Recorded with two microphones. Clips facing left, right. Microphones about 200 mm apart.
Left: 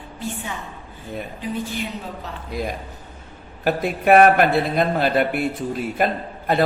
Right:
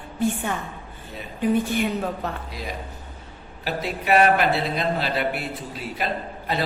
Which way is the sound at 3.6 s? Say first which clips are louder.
Left 7 dB; 50° left (ahead or behind).